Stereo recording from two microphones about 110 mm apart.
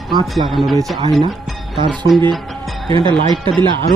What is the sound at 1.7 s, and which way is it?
Speech, 45° right (ahead or behind).